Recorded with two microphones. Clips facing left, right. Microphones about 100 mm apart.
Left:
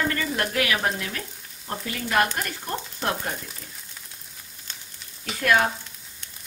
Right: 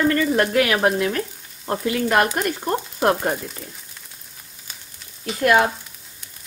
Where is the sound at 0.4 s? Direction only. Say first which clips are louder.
Right 7 dB; 40° right (ahead or behind).